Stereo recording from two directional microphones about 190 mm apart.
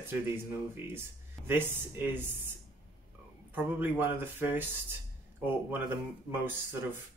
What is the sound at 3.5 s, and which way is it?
Speech, 10° right (ahead or behind).